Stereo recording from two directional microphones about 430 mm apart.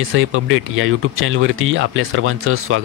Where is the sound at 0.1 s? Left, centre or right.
Right.